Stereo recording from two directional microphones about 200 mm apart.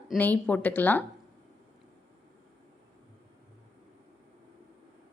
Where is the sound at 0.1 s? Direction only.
10° left (ahead or behind).